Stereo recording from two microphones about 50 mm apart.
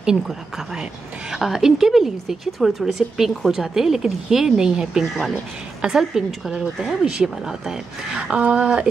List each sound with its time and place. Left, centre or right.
1.3 s a woman's voice: centre
8.2 s speech: right